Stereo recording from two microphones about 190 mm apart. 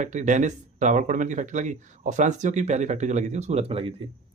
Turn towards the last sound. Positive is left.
turn(degrees=-30)  # may be behind; listen again after turning